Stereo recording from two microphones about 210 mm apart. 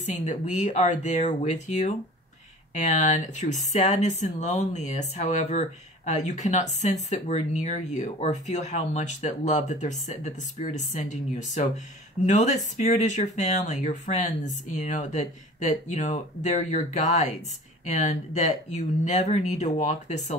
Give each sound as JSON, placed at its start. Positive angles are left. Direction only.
{"t": 0.0, "sound": "speech", "side_deg": 35}